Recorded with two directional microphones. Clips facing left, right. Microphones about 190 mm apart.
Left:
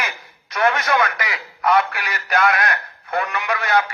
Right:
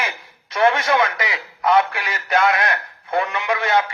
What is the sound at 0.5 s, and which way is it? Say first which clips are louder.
Speech: right 2 dB; 25° right (ahead or behind).